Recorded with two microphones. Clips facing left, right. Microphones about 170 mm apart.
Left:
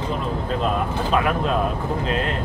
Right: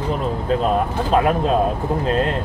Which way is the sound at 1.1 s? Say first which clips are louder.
Right 5 dB; 35° right (ahead or behind).